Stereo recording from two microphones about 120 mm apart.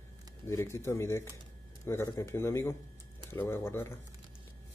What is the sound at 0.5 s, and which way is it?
Speech, 25° left (ahead or behind).